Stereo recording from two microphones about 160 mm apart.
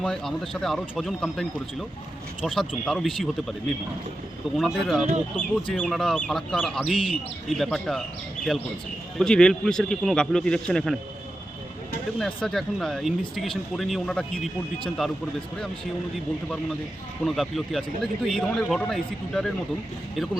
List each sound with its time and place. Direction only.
0.0 s speech: 5° left (ahead or behind)
4.5 s speech: centre (ahead or behind)
5.0 s speech: 45° right (ahead or behind)
5.7 s speech: 5° left (ahead or behind)
9.1 s speech: 5° left (ahead or behind)
12.2 s speech: 5° left (ahead or behind)
17.2 s speech: centre (ahead or behind)